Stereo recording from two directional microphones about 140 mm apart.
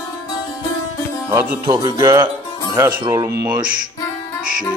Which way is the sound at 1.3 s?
10° right (ahead or behind).